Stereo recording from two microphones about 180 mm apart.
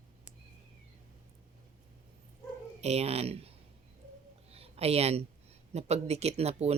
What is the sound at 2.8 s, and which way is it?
Speech, 35° right (ahead or behind).